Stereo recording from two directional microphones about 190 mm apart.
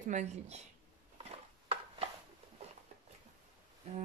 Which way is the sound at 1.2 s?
30° right (ahead or behind).